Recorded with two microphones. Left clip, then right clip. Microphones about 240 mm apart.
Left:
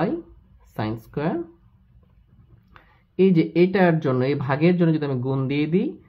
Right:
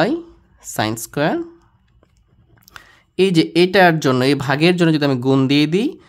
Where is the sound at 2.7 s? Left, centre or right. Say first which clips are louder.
Right 4 dB; right.